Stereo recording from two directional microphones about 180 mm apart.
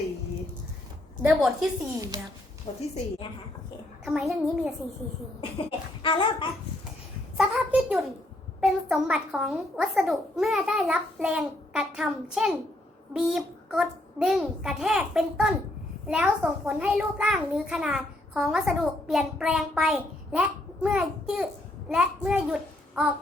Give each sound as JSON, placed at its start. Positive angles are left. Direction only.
{"t": 1.2, "sound": "a child's voice", "side_deg": -5}
{"t": 2.0, "sound": "speech", "side_deg": -20}
{"t": 2.7, "sound": "a woman's voice", "side_deg": 30}
{"t": 4.0, "sound": "a child's voice", "side_deg": -5}
{"t": 5.4, "sound": "speech", "side_deg": 30}
{"t": 7.3, "sound": "a sound", "side_deg": 0}
{"t": 8.6, "sound": "a child's voice", "side_deg": 0}